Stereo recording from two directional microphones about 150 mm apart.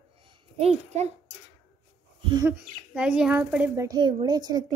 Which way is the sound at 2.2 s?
35° right (ahead or behind).